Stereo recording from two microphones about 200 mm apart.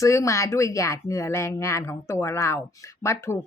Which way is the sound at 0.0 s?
15° left (ahead or behind).